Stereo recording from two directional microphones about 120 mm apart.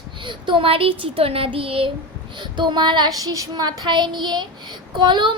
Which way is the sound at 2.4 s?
40° right (ahead or behind).